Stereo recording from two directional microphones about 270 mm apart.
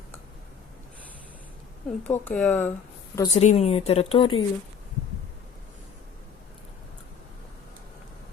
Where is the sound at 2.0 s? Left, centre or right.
Centre.